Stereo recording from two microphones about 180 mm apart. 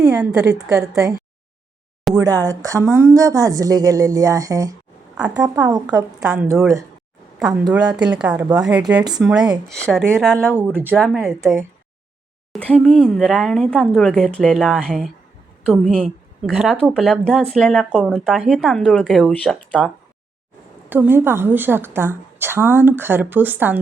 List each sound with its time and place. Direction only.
0.0 s speech: 5° right (ahead or behind)
2.1 s speech: 20° right (ahead or behind)
6.1 s a woman's voice: 5° right (ahead or behind)
10.5 s a woman's voice: 10° right (ahead or behind)
10.9 s speech: centre (ahead or behind)
11.3 s a woman's voice: 15° right (ahead or behind)
12.5 s a woman's voice: 5° left (ahead or behind)
20.9 s a woman's voice: 10° right (ahead or behind)